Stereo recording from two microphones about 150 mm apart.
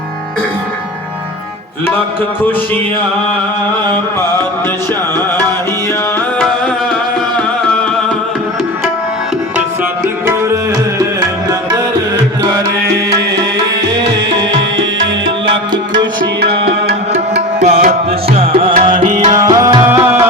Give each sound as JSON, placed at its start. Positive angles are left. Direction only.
{"t": 10.2, "sound": "tabla", "side_deg": -20}
{"t": 16.4, "sound": "music", "side_deg": -90}
{"t": 17.6, "sound": "music", "side_deg": -50}
{"t": 18.7, "sound": "music", "side_deg": -60}
{"t": 19.3, "sound": "music", "side_deg": -25}